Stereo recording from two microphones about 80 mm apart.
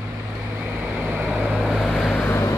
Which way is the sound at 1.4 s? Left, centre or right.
Centre.